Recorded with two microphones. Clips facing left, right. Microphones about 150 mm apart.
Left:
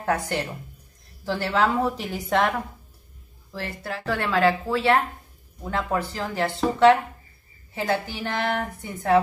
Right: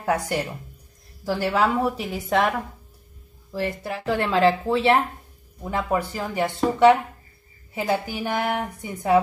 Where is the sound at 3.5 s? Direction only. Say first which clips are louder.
Right 5 dB; 15° right (ahead or behind).